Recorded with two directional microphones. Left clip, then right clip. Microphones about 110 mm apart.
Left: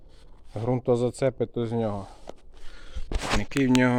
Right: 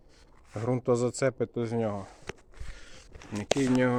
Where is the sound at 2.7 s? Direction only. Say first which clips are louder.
Left 5 dB; 20° left (ahead or behind).